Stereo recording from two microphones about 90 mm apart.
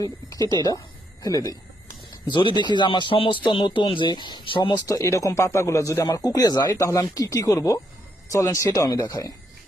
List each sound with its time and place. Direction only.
1.2 s a man's voice: 40° left (ahead or behind)
2.2 s speech: 60° left (ahead or behind)
4.9 s a man's voice: 35° left (ahead or behind)